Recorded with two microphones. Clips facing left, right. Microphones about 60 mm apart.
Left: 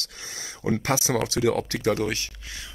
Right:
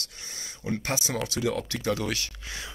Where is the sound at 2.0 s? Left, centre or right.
Left.